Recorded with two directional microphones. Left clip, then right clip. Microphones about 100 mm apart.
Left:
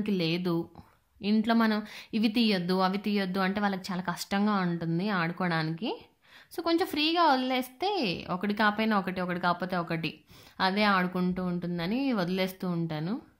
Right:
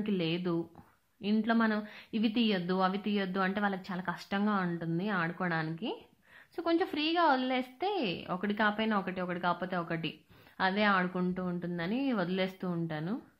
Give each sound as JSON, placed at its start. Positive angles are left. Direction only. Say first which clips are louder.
{"t": 0.0, "sound": "speech", "louder": "left 3 dB", "side_deg": 35}